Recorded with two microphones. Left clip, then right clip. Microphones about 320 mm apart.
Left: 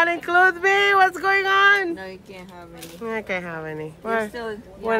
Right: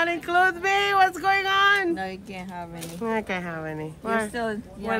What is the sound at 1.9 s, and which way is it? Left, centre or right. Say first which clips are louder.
Speech: right 3 dB; right.